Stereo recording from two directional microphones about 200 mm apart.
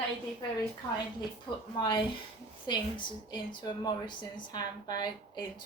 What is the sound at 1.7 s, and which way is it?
A woman's voice, 25° left (ahead or behind).